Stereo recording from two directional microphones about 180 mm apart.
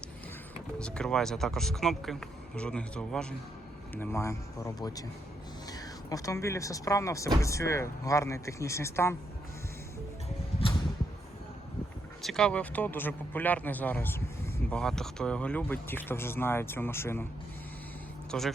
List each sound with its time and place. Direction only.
0.8 s speech: 5° left (ahead or behind)
12.2 s speech: 5° left (ahead or behind)
18.3 s speech: centre (ahead or behind)